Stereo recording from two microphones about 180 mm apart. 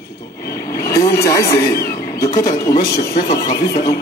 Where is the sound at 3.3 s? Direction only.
20° left (ahead or behind).